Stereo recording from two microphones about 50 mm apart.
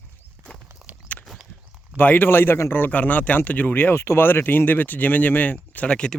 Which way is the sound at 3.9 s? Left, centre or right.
Left.